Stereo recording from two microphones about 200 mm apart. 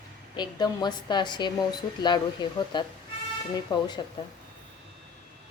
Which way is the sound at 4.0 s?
25° left (ahead or behind).